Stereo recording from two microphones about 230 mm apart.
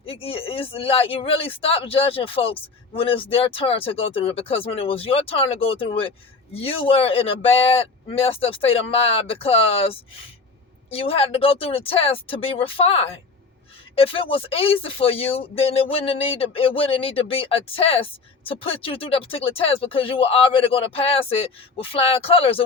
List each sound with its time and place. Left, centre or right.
0.0 s speech: left